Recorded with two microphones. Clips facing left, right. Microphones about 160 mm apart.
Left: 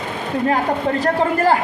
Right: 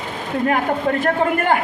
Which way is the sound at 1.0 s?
35° left (ahead or behind).